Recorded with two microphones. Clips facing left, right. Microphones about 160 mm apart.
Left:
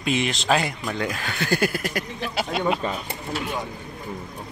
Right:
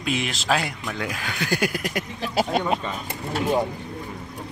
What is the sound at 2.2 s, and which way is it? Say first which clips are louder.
Speech: right 3 dB; 45° right (ahead or behind).